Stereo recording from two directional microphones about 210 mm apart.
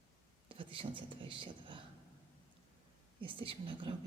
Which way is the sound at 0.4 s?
25° right (ahead or behind).